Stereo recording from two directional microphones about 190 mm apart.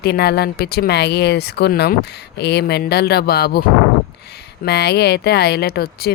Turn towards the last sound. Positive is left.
turn(degrees=55)  # may be behind; listen again after turning